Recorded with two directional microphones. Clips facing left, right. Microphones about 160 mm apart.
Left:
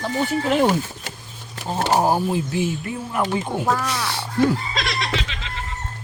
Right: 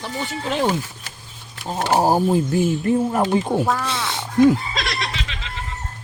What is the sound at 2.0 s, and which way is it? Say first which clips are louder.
Speech: right 3 dB; 40° right (ahead or behind).